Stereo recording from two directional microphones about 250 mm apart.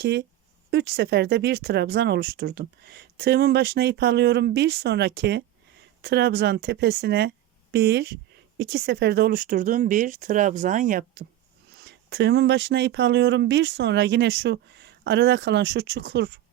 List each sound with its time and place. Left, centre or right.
0.0 s speech: right
11.8 s speech: right